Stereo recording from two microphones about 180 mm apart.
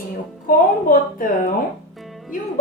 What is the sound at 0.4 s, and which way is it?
A woman's voice, 50° left (ahead or behind).